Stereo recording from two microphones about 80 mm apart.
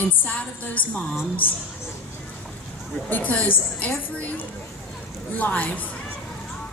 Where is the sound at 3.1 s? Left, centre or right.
Centre.